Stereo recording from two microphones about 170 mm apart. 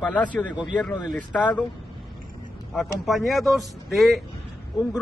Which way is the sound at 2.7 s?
Centre (ahead or behind).